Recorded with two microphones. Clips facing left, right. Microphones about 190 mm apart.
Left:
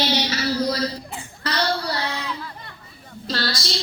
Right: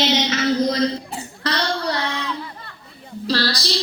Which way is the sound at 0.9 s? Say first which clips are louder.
Right 5 dB; 35° right (ahead or behind).